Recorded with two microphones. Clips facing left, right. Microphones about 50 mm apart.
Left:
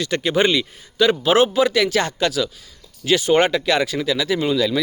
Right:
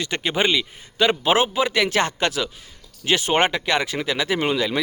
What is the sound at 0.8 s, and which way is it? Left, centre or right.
A man's voice, right.